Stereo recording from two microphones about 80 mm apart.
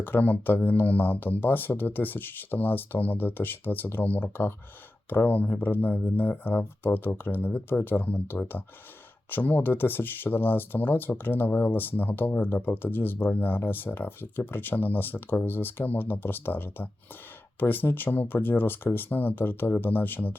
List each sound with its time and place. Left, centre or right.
0.0 s speech: left